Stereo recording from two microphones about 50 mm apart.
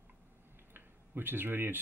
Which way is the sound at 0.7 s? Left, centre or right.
Right.